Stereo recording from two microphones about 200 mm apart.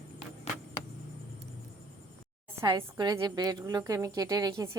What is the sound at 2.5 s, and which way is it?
A woman's voice, 15° right (ahead or behind).